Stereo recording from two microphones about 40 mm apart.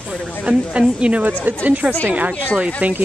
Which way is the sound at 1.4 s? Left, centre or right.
Right.